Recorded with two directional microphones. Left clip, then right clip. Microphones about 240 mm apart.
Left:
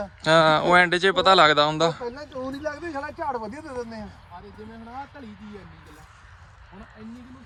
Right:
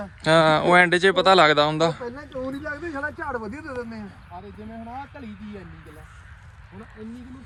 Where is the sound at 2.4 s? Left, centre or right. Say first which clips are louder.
Right 1 dB; left.